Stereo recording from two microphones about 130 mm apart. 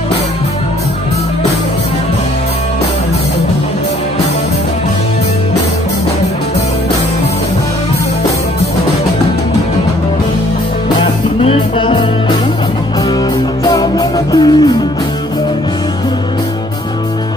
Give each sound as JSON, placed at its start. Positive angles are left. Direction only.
{"t": 11.0, "sound": "music", "side_deg": 45}
{"t": 13.7, "sound": "music", "side_deg": 30}